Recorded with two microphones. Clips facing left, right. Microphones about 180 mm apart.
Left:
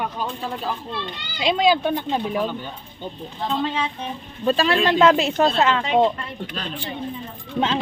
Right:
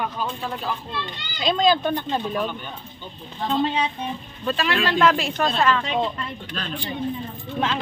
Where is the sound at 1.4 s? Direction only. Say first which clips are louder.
Left 1 dB; 10° left (ahead or behind).